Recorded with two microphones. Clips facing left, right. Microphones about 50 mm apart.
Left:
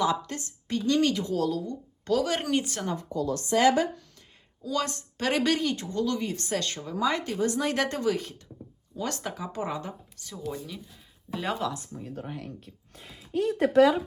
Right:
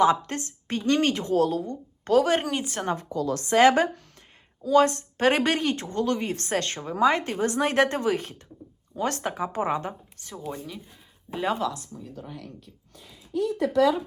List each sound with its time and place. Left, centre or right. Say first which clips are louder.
0.0 s a woman's voice: right 6 dB; right
2.4 s speech: left 2 dB; centre
2.8 s a woman's voice: right 4 dB; right
3.1 s a woman's voice: even; right
3.6 s a woman's voice: right 4 dB; right
4.6 s a woman's voice: right 10 dB; right
11.3 s speech: right 2 dB; centre
13.0 s speech: right 1 dB; left
13.7 s speech: left 2 dB; left